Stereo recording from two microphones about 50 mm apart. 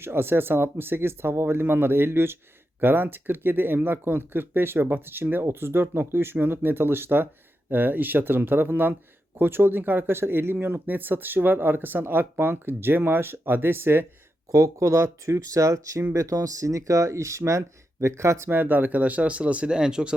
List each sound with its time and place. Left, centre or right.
0.0 s speech: right
6.3 s speech: right
7.7 s speech: right
14.5 s speech: right
18.0 s speech: right
18.5 s speech: right; by 20.1 s centre